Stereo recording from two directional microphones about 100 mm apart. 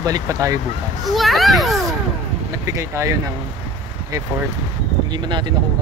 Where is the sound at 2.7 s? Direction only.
30° right (ahead or behind).